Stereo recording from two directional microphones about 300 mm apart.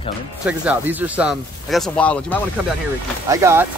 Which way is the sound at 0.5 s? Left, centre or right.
Centre.